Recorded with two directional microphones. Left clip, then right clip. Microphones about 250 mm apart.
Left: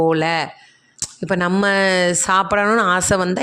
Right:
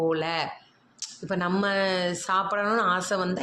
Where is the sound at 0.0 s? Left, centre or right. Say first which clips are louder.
Left 9 dB; left.